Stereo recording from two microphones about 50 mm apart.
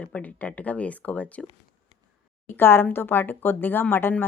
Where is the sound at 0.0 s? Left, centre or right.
Left.